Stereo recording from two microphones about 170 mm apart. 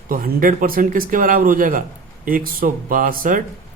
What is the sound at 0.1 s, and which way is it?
Speech, 55° right (ahead or behind).